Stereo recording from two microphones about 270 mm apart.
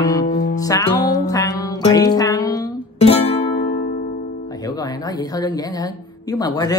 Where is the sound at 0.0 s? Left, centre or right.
Centre.